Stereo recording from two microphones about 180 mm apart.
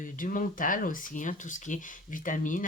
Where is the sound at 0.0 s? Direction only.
50° left (ahead or behind).